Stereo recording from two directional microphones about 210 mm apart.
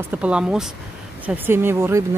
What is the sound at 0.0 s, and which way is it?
Speech, 5° right (ahead or behind).